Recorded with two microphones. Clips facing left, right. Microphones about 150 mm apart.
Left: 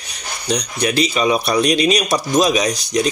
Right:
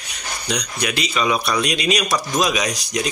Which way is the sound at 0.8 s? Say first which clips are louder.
Left 5 dB; 30° left (ahead or behind).